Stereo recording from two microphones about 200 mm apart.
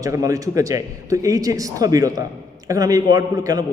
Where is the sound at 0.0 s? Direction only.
15° right (ahead or behind).